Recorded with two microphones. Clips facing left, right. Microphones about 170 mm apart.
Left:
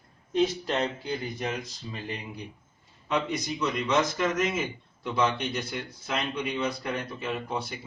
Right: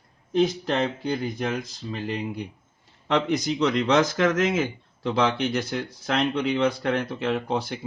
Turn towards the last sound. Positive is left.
turn(degrees=-90)